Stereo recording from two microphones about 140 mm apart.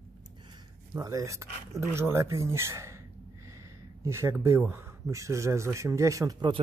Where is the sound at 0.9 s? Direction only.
25° right (ahead or behind).